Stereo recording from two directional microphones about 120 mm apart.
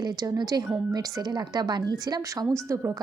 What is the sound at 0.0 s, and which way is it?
A woman's voice, 35° right (ahead or behind).